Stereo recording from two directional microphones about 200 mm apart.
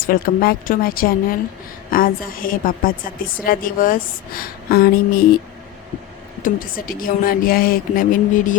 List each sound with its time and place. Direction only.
0.1 s a woman's voice: 45° left (ahead or behind)
6.4 s a woman's voice: 45° left (ahead or behind)